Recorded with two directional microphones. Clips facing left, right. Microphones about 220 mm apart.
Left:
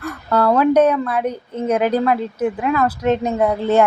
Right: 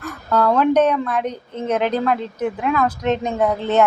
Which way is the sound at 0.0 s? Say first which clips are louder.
Left 1 dB; 10° left (ahead or behind).